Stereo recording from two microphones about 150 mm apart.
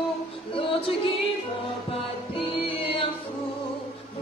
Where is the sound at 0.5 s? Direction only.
40° left (ahead or behind).